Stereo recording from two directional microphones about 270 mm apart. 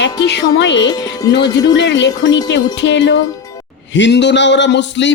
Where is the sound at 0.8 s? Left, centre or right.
Centre.